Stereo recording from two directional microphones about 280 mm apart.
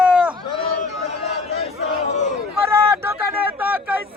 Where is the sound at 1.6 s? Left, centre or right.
Left.